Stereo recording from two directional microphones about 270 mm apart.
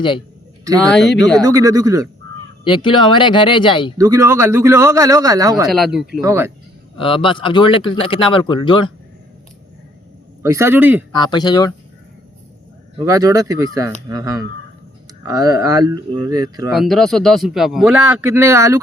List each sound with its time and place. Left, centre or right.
1.0 s speech: left
1.5 s a man's voice: centre
2.6 s speech: centre
3.9 s a man's voice: centre
5.6 s a man's voice: centre
7.0 s speech: centre
10.4 s a man's voice: centre
11.1 s speech: centre
13.1 s a man's voice: centre
16.7 s a man's voice: centre